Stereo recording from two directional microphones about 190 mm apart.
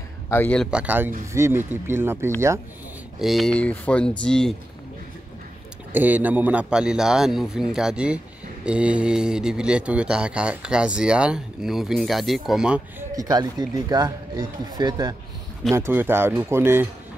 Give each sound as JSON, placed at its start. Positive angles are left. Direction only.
{"t": 0.3, "sound": "a man's voice", "side_deg": 10}
{"t": 0.7, "sound": "speech", "side_deg": -5}
{"t": 3.2, "sound": "a man's voice", "side_deg": 0}
{"t": 5.9, "sound": "a man's voice", "side_deg": -10}
{"t": 13.1, "sound": "speech", "side_deg": -20}